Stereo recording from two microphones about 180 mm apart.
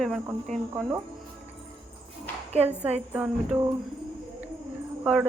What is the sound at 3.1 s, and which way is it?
Speech, 10° right (ahead or behind).